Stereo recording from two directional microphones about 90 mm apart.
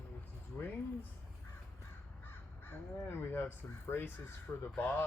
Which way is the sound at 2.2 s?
25° left (ahead or behind).